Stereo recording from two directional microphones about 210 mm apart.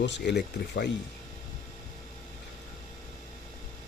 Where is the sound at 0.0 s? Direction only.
50° left (ahead or behind).